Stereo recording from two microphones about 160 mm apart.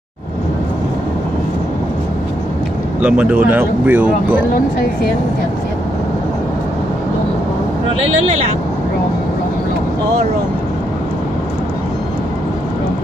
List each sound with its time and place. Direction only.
3.0 s speech: 5° right (ahead or behind)
8.0 s speech: 45° right (ahead or behind)